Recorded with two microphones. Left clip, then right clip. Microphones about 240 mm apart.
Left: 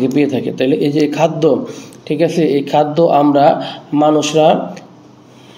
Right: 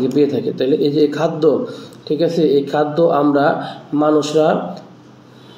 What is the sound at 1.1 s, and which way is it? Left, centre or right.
Speech, left.